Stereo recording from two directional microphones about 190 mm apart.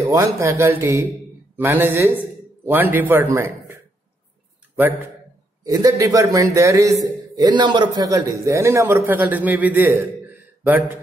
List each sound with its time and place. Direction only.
0.0 s a man's voice: 15° right (ahead or behind)